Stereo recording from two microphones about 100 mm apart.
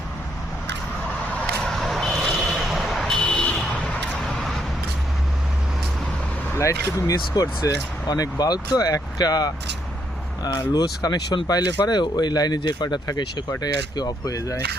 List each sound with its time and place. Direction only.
1.3 s vehicle: 10° left (ahead or behind)
1.7 s vehicle: centre (ahead or behind)
3.2 s a sound: 10° left (ahead or behind)
6.5 s speech: 30° left (ahead or behind)